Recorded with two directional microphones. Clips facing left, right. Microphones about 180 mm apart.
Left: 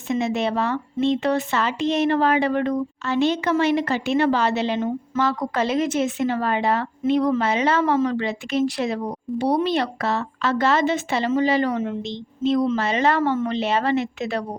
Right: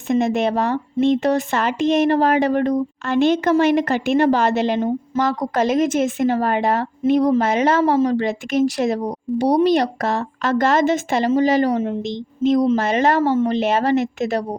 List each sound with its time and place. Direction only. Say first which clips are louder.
0.1 s speech: right 4 dB; 50° right (ahead or behind); by 11.9 s 35° right (ahead or behind)
12.7 s speech: right 3 dB; 45° right (ahead or behind)
13.6 s speech: right 4 dB; 45° right (ahead or behind)